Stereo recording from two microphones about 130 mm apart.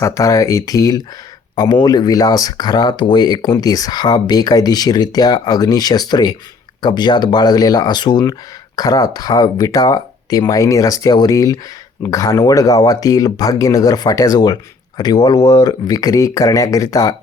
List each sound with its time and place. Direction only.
0.0 s speech: 25° left (ahead or behind)